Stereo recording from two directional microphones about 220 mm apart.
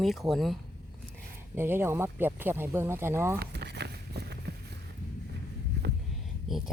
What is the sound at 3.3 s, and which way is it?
Walk, 50° right (ahead or behind).